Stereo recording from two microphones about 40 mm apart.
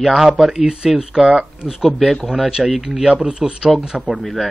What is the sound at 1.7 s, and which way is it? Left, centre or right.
A man's voice, centre.